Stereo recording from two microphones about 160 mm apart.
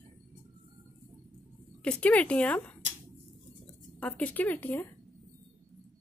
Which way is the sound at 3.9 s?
10° left (ahead or behind).